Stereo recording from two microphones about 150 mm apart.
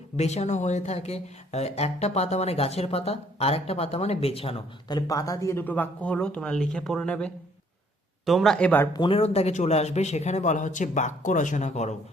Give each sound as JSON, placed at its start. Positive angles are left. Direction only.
{"t": 0.2, "sound": "speech", "side_deg": 45}
{"t": 4.9, "sound": "speech", "side_deg": 25}
{"t": 8.9, "sound": "speech", "side_deg": 35}